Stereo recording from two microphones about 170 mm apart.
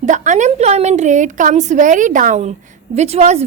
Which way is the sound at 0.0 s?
45° right (ahead or behind).